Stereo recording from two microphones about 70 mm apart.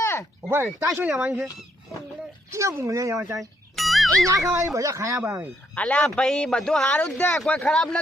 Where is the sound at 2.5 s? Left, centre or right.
Right.